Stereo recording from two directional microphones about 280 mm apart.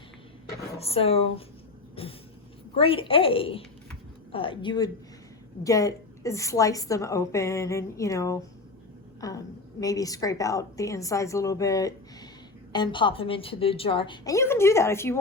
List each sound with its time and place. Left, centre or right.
0.8 s a woman's voice: left